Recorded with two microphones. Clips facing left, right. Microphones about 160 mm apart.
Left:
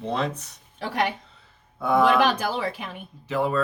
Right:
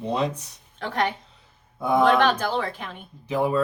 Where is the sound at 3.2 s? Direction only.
15° right (ahead or behind).